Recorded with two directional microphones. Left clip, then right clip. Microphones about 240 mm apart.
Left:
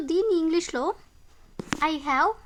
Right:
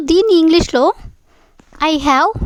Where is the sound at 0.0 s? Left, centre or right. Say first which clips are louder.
Right 13 dB; right.